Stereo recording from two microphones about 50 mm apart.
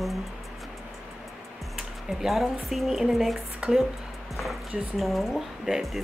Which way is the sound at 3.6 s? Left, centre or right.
Centre.